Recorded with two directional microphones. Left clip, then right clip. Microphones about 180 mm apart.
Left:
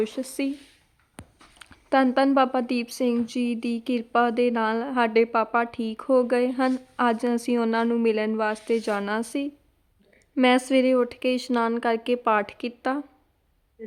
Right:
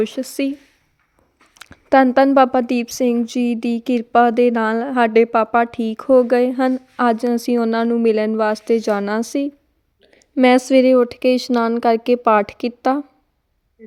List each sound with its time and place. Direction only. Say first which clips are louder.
0.0 s a woman's voice: right 7 dB; 20° right (ahead or behind)
1.5 s a woman's voice: right 9 dB; 25° right (ahead or behind)